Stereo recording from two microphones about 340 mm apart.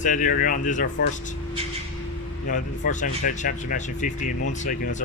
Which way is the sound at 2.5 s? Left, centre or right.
Left.